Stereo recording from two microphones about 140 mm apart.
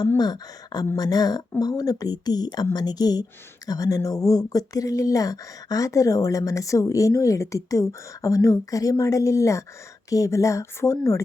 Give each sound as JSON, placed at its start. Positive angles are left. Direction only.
{"t": 0.2, "sound": "speech", "side_deg": 30}